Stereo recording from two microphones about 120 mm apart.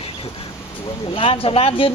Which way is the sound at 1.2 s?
50° left (ahead or behind).